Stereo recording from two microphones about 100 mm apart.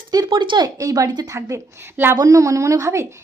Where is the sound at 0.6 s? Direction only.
35° right (ahead or behind).